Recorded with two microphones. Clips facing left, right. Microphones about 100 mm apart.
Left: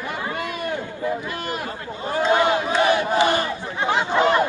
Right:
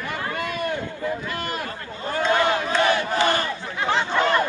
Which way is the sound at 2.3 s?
15° left (ahead or behind).